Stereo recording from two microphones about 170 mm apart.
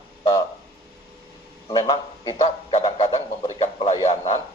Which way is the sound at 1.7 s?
25° left (ahead or behind).